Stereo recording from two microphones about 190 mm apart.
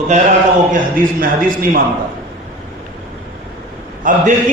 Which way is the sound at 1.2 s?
50° right (ahead or behind).